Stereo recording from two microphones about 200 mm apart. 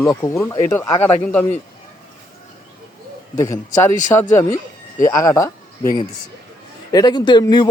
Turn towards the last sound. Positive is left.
turn(degrees=20)  # may be behind; listen again after turning